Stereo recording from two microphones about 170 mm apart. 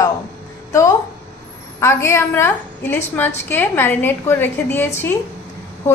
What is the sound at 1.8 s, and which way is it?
A woman's voice, 15° left (ahead or behind).